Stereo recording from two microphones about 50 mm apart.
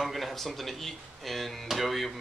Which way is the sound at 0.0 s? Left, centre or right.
Centre.